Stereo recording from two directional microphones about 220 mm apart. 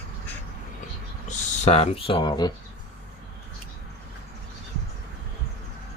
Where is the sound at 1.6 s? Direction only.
30° left (ahead or behind).